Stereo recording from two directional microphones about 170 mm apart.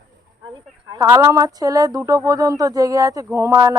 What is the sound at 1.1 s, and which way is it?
Speech, 20° right (ahead or behind).